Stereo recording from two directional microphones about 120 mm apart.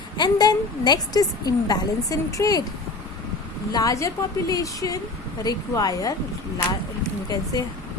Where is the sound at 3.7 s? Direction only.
30° left (ahead or behind).